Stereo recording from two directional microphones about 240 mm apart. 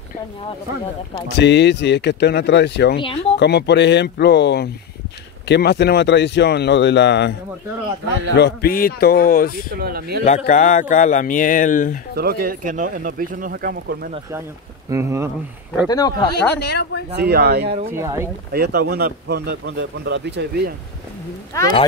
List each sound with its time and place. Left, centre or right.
1.3 s speech: left
3.0 s speech: left
3.3 s speech: left
8.4 s speech: left
9.8 s speech: right
10.2 s speech: left
12.2 s speech: right
14.9 s speech: centre
15.9 s speech: centre
16.3 s speech: left
17.1 s speech: right
17.9 s speech: centre
18.5 s speech: right